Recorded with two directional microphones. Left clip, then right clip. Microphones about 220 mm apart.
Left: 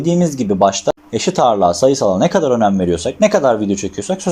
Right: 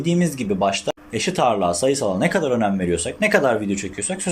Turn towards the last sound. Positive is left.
turn(degrees=15)  # may be behind; listen again after turning